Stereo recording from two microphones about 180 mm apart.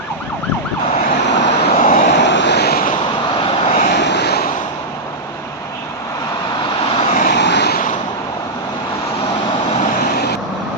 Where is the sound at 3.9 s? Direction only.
70° left (ahead or behind).